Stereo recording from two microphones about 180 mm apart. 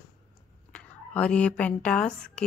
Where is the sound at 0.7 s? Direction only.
5° left (ahead or behind).